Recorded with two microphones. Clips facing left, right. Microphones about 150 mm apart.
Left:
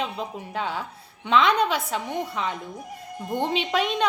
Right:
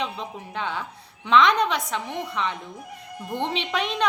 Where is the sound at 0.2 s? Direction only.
40° left (ahead or behind).